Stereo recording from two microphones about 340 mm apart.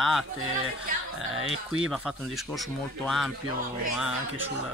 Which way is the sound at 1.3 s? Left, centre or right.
Right.